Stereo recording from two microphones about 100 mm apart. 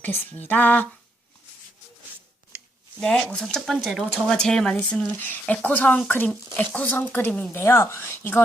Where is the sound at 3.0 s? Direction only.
5° left (ahead or behind).